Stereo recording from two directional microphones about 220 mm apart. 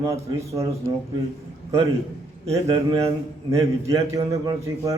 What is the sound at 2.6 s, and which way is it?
A man's voice, 20° right (ahead or behind).